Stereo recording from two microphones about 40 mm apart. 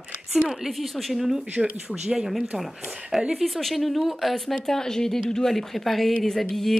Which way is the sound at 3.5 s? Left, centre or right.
Centre.